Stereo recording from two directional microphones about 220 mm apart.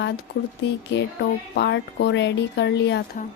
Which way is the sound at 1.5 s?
50° left (ahead or behind).